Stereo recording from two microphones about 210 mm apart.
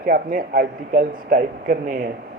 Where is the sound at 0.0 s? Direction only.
45° right (ahead or behind).